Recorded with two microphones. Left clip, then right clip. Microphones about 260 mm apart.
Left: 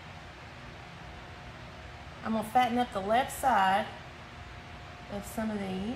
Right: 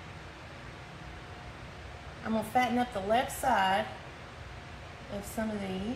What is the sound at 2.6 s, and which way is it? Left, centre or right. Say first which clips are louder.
A woman's voice: left 2 dB; centre.